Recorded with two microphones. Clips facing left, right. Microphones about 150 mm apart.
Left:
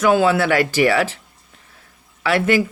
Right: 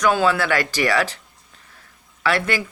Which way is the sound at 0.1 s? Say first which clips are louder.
Left 6 dB; 15° left (ahead or behind).